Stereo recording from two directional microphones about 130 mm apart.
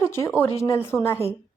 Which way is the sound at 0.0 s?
20° left (ahead or behind).